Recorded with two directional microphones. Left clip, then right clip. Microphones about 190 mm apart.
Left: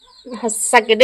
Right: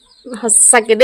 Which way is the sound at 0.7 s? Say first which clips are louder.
Even; 30° right (ahead or behind).